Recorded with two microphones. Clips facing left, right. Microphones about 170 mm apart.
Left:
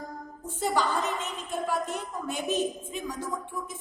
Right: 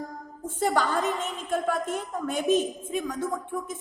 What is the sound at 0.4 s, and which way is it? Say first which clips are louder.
A woman's voice: right 2 dB; 50° right (ahead or behind).